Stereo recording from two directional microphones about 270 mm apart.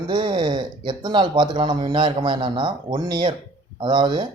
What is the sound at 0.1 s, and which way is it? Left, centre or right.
Speech, centre.